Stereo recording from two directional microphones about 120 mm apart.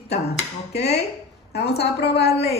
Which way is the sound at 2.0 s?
60° left (ahead or behind).